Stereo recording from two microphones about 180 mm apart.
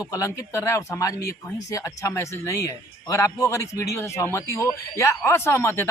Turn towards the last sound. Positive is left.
turn(degrees=15)  # may be behind; listen again after turning